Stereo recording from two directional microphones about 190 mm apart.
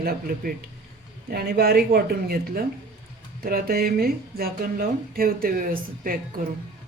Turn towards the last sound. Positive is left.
turn(degrees=-50)  # may be behind; listen again after turning